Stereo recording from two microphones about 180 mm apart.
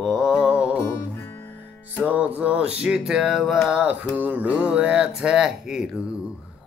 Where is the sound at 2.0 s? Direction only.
10° right (ahead or behind).